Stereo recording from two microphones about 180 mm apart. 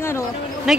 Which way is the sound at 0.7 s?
Centre (ahead or behind).